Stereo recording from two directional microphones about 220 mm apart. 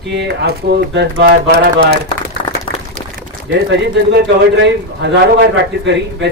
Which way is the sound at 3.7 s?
50° right (ahead or behind).